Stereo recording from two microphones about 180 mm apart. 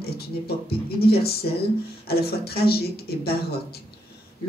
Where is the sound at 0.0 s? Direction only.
60° left (ahead or behind).